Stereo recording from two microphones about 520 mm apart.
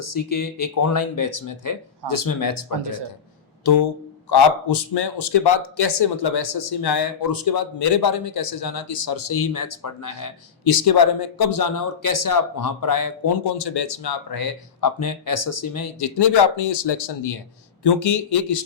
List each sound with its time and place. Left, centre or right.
0.0 s speech: left
3.6 s a man's voice: left